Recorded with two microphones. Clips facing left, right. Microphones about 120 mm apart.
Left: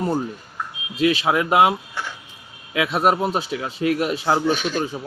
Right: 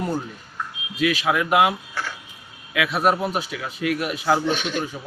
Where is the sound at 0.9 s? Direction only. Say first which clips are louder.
Left 2 dB; 25° left (ahead or behind).